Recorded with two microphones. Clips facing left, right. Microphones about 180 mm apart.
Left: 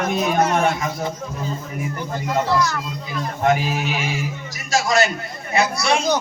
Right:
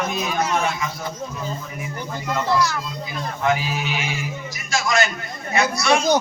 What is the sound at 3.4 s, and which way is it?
Speech, 45° left (ahead or behind).